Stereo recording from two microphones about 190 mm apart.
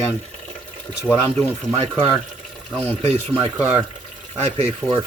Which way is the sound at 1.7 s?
30° right (ahead or behind).